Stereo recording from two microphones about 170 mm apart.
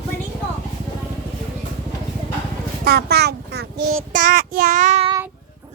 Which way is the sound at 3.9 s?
50° right (ahead or behind).